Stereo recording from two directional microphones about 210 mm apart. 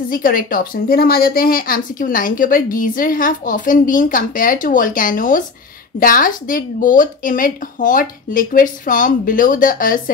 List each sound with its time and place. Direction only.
0.1 s a woman's voice: 40° left (ahead or behind)